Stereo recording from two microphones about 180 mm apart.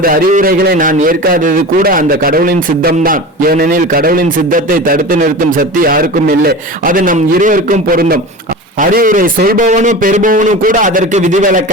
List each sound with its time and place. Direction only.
0.0 s a man's voice: 50° right (ahead or behind)